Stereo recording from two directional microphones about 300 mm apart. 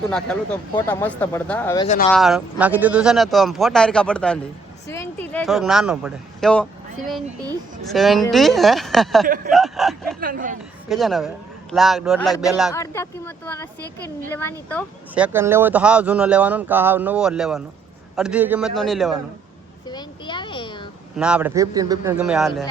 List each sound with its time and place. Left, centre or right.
0.1 s speech: centre
2.1 s speech: centre
9.2 s speech: right
9.5 s speech: centre
10.2 s speech: right
10.8 s speech: centre
19.9 s a sound: centre
21.2 s speech: centre